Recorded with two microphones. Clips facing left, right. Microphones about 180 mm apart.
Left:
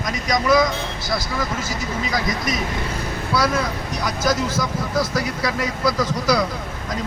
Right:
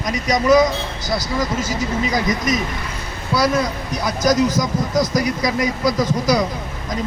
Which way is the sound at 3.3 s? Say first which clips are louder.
Right 3 dB; 15° right (ahead or behind).